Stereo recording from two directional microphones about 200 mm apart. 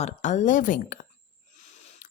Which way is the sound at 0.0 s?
35° left (ahead or behind).